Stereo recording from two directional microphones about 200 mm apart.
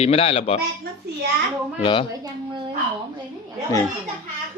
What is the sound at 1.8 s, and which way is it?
Speech, 25° left (ahead or behind).